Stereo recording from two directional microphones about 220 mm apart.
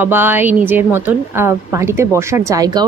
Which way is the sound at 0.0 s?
10° right (ahead or behind).